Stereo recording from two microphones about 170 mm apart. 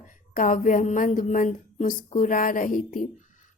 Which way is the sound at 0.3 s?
50° left (ahead or behind).